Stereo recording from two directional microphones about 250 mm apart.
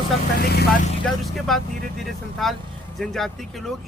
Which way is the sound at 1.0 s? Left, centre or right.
Centre.